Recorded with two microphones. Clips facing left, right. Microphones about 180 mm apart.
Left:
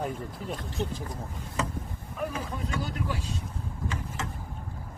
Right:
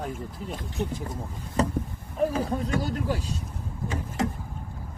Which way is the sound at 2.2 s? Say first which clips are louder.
Right 8 dB; 35° right (ahead or behind).